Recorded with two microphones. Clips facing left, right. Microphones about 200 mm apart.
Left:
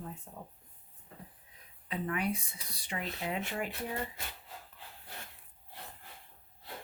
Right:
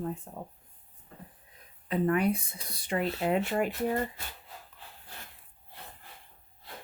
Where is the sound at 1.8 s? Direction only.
50° right (ahead or behind).